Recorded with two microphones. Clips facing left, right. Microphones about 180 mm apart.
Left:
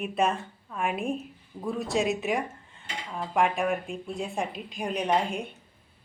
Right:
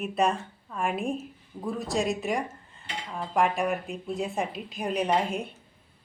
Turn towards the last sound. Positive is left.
turn(degrees=0)  # may be behind; listen again after turning